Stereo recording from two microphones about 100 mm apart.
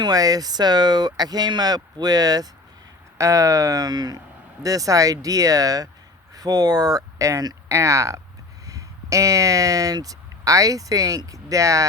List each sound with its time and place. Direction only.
0.0 s speech: 40° right (ahead or behind)